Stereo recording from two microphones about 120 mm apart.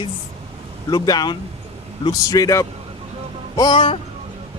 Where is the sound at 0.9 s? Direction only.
35° left (ahead or behind).